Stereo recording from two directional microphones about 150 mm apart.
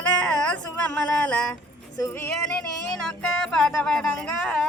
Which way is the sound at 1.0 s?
5° left (ahead or behind).